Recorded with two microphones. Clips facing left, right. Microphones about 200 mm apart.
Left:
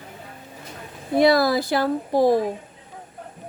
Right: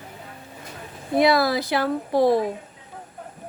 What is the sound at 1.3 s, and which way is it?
Speech, 45° left (ahead or behind).